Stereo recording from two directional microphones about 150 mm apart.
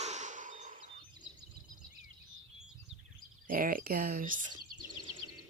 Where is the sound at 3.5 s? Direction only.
70° right (ahead or behind).